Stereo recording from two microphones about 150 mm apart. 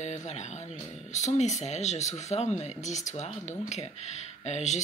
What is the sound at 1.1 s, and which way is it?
Speech, 50° left (ahead or behind).